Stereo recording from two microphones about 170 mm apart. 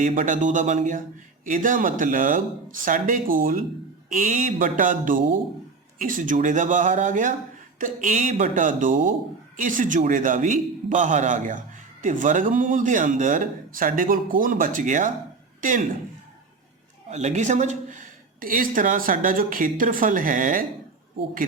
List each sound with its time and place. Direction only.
0.2 s speech: 50° right (ahead or behind)
17.1 s speech: 40° right (ahead or behind)